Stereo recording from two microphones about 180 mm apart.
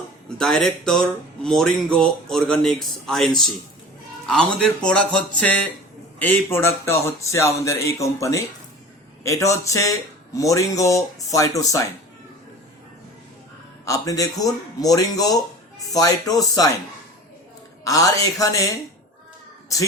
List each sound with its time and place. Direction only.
0.3 s speech: 5° left (ahead or behind)
13.8 s speech: 20° left (ahead or behind)
17.8 s speech: 20° left (ahead or behind)